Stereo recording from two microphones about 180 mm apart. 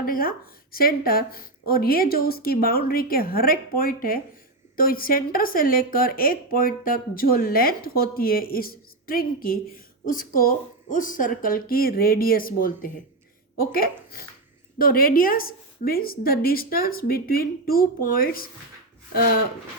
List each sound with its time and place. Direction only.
0.0 s a woman's voice: 55° left (ahead or behind)